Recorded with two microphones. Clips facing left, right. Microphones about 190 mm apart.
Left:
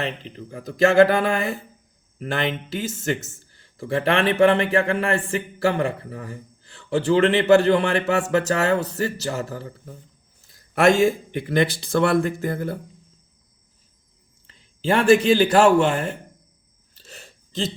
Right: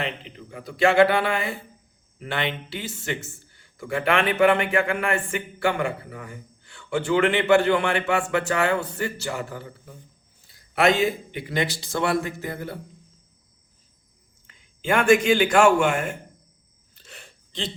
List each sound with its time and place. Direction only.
0.0 s a man's voice: 35° left (ahead or behind)
14.4 s a man's voice: 35° left (ahead or behind)
16.9 s a sound: 35° left (ahead or behind)